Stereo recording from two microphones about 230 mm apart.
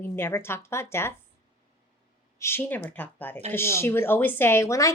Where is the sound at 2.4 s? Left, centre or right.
Centre.